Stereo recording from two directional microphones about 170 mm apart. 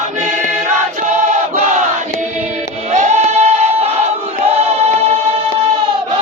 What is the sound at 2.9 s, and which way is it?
Music, 45° right (ahead or behind).